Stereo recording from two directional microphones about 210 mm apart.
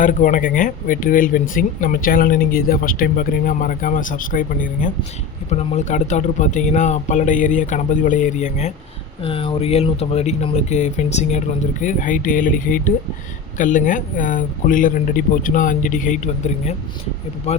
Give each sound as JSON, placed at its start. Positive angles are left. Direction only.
{"t": 0.0, "sound": "speech", "side_deg": 40}